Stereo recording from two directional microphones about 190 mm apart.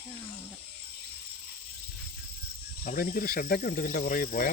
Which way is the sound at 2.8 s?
50° left (ahead or behind).